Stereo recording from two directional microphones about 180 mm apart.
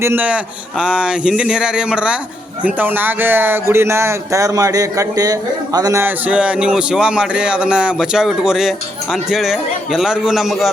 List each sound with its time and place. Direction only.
0.0 s speech: 10° right (ahead or behind)